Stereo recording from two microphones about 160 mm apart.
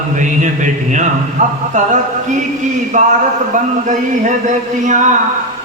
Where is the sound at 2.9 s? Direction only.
50° right (ahead or behind).